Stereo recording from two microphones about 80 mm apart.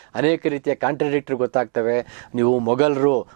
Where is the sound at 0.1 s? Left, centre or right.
Centre.